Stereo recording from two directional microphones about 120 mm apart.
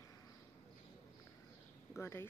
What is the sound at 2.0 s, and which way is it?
Speech, 20° left (ahead or behind).